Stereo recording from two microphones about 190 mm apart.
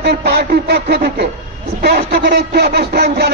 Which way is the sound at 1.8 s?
60° right (ahead or behind).